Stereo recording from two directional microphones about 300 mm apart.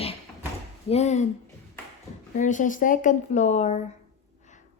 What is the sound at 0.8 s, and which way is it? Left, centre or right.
Speech, left.